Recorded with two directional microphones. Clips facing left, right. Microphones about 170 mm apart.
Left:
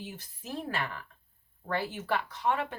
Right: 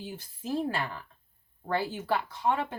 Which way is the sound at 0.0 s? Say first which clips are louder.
Right 4 dB; 30° right (ahead or behind).